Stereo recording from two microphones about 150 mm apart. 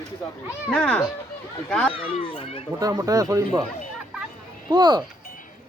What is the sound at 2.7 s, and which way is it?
Speech, 25° right (ahead or behind).